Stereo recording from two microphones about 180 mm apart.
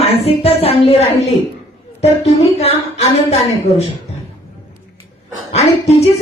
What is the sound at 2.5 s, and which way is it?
Speech, 35° left (ahead or behind).